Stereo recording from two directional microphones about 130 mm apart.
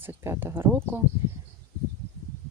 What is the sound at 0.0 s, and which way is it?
Speech, 15° right (ahead or behind).